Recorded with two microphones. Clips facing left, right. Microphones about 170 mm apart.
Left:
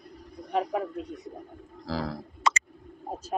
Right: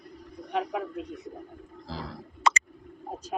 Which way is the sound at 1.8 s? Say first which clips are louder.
Left 7 dB; 90° left.